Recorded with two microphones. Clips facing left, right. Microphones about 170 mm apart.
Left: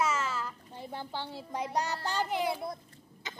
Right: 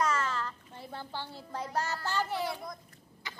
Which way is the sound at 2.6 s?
25° left (ahead or behind).